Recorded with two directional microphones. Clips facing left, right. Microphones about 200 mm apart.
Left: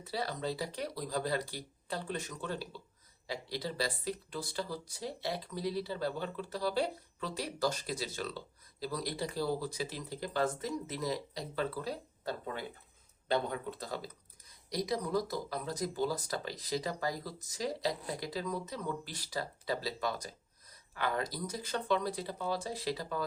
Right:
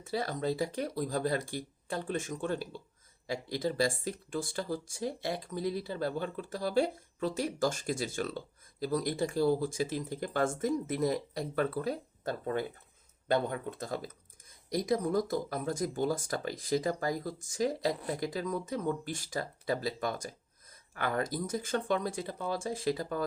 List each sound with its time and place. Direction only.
0.0 s speech: 50° right (ahead or behind)